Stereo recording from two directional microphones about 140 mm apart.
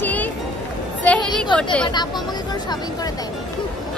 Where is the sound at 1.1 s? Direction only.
5° left (ahead or behind).